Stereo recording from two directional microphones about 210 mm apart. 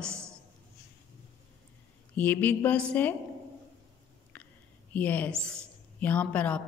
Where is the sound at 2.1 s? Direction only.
10° left (ahead or behind).